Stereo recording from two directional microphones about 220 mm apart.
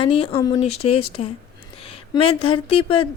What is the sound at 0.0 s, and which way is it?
Speech, 25° left (ahead or behind).